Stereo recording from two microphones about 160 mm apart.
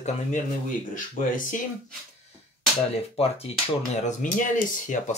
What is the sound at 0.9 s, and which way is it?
Speech, 55° left (ahead or behind).